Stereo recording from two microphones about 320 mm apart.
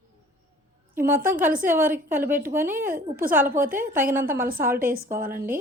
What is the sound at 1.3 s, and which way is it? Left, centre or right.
A woman's voice, right.